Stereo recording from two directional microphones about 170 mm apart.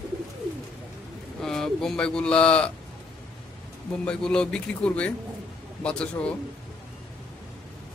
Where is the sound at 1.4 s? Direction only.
5° left (ahead or behind).